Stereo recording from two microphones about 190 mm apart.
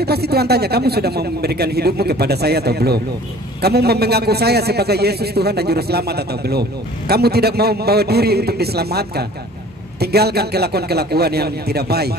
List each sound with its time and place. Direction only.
0.0 s speech: 55° right (ahead or behind)